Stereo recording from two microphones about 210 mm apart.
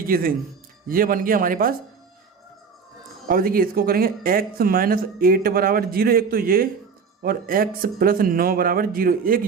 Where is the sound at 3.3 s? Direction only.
45° right (ahead or behind).